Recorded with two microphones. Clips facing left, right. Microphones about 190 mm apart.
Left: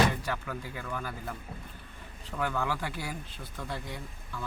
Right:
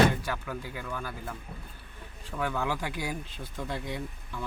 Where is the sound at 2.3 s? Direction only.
15° right (ahead or behind).